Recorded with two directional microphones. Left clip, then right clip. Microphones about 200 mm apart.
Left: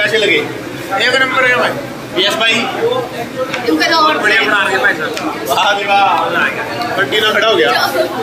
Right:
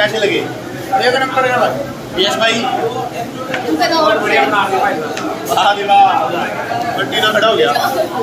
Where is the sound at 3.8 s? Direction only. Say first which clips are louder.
Left 2 dB; centre (ahead or behind).